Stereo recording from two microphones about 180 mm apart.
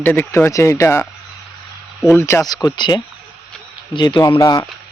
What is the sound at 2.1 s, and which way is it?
A man's voice, 15° left (ahead or behind).